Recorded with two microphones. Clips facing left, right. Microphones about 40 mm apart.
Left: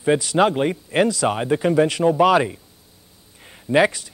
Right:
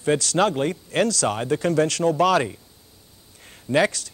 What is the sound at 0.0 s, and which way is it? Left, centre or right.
Speech, centre.